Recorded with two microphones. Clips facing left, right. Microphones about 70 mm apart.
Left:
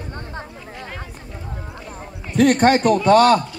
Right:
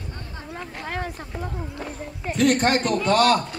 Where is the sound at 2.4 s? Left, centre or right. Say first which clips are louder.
Left 5 dB; left.